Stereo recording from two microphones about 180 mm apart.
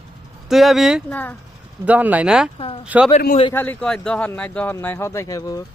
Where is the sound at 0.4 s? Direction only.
Centre (ahead or behind).